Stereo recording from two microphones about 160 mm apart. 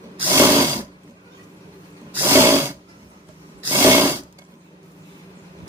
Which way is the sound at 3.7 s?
10° right (ahead or behind).